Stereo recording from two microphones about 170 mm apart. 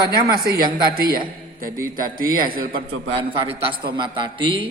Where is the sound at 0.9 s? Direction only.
60° right (ahead or behind).